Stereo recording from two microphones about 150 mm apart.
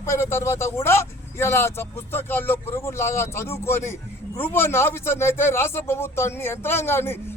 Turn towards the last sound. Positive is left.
turn(degrees=15)  # may be behind; listen again after turning